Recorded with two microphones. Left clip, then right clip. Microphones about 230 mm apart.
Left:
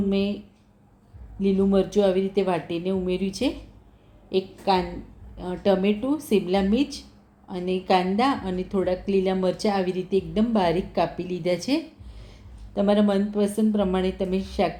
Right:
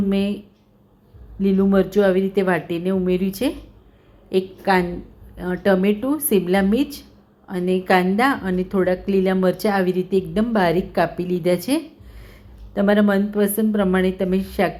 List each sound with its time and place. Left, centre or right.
0.1 s a woman's voice: centre
1.4 s a woman's voice: centre